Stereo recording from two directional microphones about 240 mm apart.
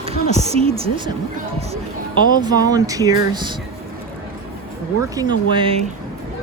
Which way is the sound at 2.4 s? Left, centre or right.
Centre.